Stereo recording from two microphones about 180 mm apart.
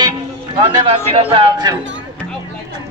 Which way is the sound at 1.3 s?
20° right (ahead or behind).